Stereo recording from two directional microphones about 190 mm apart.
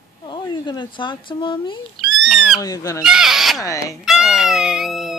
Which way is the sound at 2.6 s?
20° left (ahead or behind).